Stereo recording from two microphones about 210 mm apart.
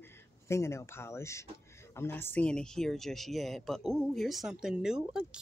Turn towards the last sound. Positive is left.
turn(degrees=-5)  # may be behind; listen again after turning